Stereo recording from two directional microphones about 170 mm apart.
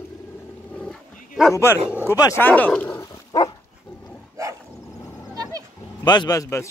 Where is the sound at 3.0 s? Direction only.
25° left (ahead or behind).